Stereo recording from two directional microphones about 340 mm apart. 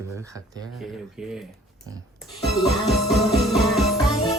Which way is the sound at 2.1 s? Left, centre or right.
Centre.